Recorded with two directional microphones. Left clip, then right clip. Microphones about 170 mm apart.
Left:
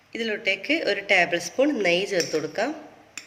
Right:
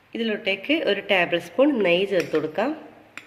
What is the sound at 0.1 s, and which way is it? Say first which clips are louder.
A woman's voice: even; 35° right (ahead or behind).